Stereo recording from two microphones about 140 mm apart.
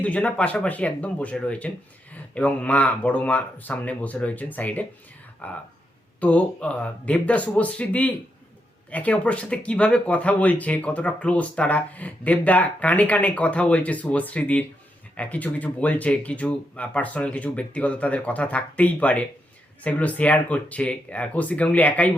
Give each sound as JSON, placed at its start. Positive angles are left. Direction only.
{"t": 0.0, "sound": "speech", "side_deg": 10}